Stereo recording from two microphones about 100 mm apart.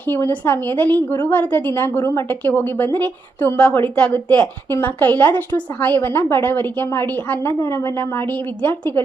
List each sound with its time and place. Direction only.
0.1 s a woman's voice: 20° left (ahead or behind)